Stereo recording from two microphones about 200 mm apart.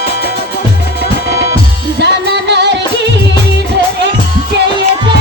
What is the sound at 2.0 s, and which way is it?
Music, 60° right (ahead or behind).